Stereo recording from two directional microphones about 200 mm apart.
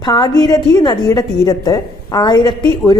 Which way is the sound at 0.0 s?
20° left (ahead or behind).